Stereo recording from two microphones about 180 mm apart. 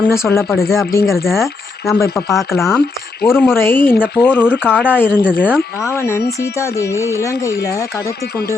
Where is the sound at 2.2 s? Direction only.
15° left (ahead or behind).